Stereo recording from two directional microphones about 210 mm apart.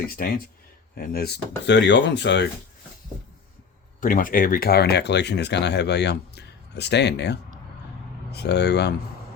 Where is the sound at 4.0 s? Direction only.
40° left (ahead or behind).